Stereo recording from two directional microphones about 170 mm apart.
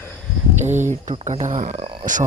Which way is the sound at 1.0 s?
40° right (ahead or behind).